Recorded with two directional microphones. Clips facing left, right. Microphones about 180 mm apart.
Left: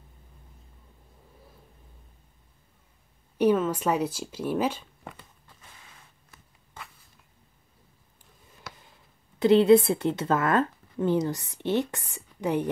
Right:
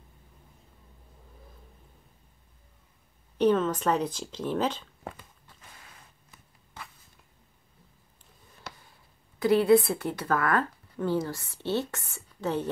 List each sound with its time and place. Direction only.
3.3 s speech: 10° left (ahead or behind)
9.4 s speech: 20° left (ahead or behind)